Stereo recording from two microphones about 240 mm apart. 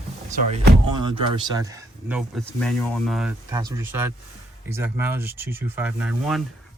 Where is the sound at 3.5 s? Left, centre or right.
Centre.